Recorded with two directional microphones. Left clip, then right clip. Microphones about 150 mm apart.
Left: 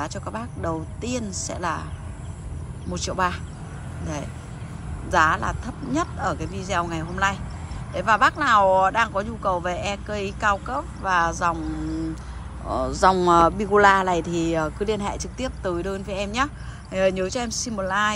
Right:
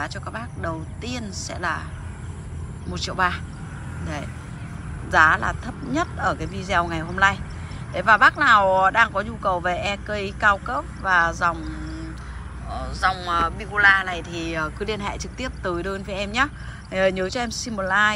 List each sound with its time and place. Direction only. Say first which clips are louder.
0.0 s speech: even; 20° left (ahead or behind)
2.9 s speech: right 1 dB; 20° left (ahead or behind)
5.1 s speech: right 3 dB; 15° left (ahead or behind); by 12.1 s 30° left (ahead or behind)
12.7 s speech: left 5 dB; 45° left (ahead or behind); by 18.1 s 15° left (ahead or behind)